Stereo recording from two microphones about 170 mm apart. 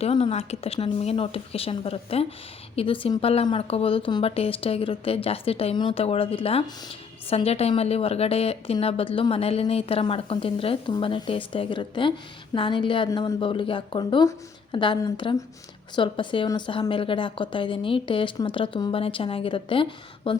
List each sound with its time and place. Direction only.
0.0 s a woman's voice: 35° left (ahead or behind)